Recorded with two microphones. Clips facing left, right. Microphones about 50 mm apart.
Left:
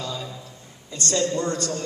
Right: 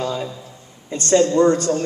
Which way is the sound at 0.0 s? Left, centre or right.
Right.